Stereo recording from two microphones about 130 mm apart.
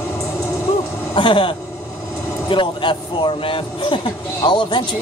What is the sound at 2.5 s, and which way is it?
Speech, 40° left (ahead or behind).